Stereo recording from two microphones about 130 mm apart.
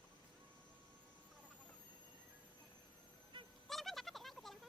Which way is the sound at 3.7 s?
Centre (ahead or behind).